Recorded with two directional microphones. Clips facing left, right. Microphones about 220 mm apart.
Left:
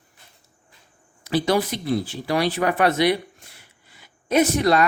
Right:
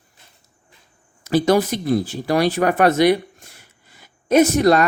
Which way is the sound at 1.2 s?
45° right (ahead or behind).